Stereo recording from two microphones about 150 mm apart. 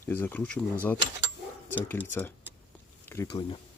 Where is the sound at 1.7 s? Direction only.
15° left (ahead or behind).